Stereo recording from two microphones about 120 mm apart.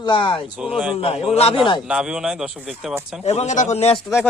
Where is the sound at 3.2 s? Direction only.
65° left (ahead or behind).